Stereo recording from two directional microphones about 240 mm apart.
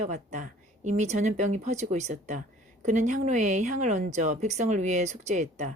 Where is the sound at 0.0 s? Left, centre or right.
Right.